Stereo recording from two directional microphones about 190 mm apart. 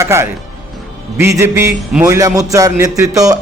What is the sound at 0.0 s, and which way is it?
A man's voice, 15° right (ahead or behind).